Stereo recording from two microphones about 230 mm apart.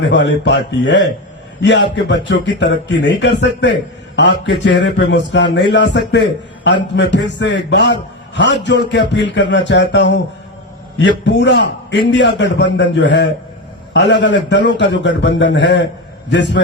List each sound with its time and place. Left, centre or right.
0.1 s speech: left
11.3 s a man's voice: left